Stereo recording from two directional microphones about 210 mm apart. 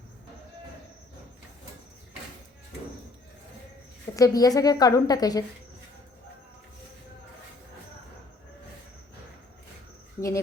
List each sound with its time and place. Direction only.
4.1 s a woman's voice: 15° left (ahead or behind)
10.2 s speech: 15° left (ahead or behind)